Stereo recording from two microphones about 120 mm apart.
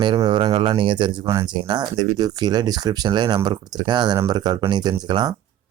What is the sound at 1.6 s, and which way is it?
Speech, 40° right (ahead or behind).